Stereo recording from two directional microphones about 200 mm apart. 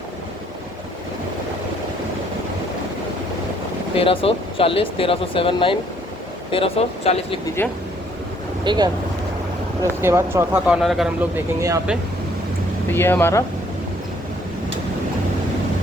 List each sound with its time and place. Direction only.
3.9 s speech: 25° left (ahead or behind)
8.6 s speech: 20° right (ahead or behind)
12.9 s speech: 10° left (ahead or behind)